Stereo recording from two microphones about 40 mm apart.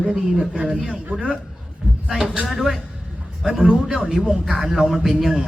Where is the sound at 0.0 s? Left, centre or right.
Centre.